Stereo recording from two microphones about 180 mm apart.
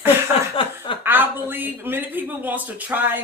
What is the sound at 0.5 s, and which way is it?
Chuckle, 30° left (ahead or behind).